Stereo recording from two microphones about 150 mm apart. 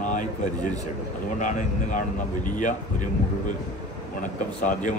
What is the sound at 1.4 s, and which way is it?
Speech, 55° left (ahead or behind).